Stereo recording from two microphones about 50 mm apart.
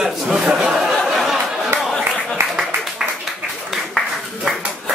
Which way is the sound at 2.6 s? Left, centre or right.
Centre.